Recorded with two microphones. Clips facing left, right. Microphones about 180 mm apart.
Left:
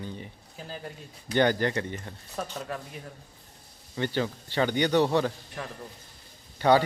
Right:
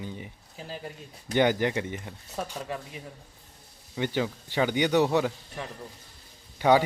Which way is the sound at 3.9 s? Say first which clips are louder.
Even; 15° right (ahead or behind).